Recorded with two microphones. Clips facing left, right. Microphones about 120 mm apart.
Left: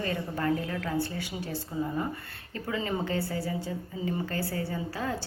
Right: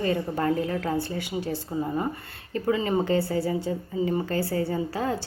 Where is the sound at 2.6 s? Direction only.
35° right (ahead or behind).